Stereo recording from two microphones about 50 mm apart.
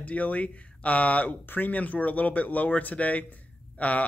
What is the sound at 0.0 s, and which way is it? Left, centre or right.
Speech, left.